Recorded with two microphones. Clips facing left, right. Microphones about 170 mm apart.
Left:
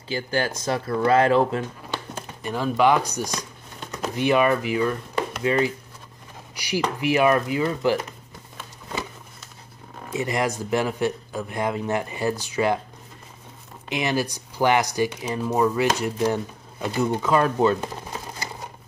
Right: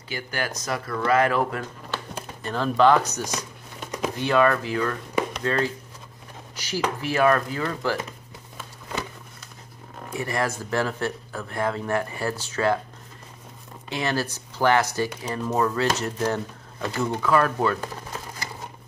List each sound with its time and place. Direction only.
0.1 s a man's voice: 30° left (ahead or behind); by 3.4 s 15° left (ahead or behind)
3.8 s a sound: 10° right (ahead or behind)
4.2 s a man's voice: 15° left (ahead or behind)
10.0 s a man's voice: 20° left (ahead or behind)
13.8 s a man's voice: 15° left (ahead or behind)